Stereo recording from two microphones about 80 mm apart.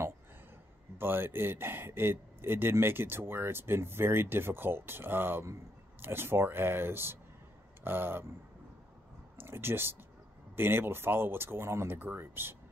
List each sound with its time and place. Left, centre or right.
0.9 s speech: right
9.4 s speech: right